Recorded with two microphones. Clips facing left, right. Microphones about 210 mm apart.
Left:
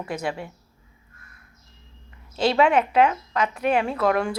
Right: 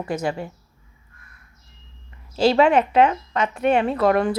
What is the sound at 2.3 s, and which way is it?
Speech, centre (ahead or behind).